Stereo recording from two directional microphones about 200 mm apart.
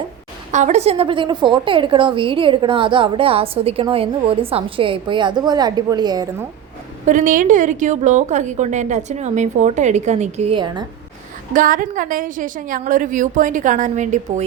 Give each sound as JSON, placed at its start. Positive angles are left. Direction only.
{"t": 0.5, "sound": "a woman's voice", "side_deg": -35}
{"t": 7.1, "sound": "a woman's voice", "side_deg": -40}
{"t": 11.5, "sound": "a woman's voice", "side_deg": -45}